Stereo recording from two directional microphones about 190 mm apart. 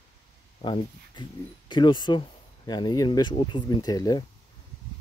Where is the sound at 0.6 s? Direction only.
25° left (ahead or behind).